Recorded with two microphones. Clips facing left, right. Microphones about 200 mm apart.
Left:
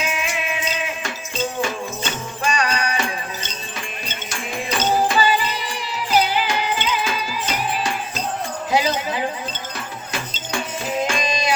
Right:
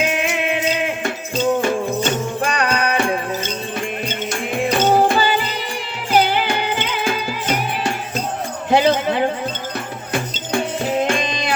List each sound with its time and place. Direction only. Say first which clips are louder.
0.0 s music: right 6 dB; 60° right (ahead or behind)
8.7 s a sound: right 6 dB; 60° right (ahead or behind)
10.1 s music: right 8 dB; 55° right (ahead or behind)